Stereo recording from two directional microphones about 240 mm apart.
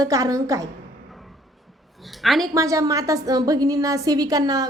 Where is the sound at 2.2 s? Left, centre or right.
Centre.